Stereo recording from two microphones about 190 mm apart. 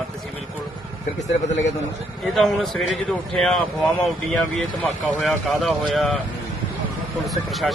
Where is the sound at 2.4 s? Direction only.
Centre (ahead or behind).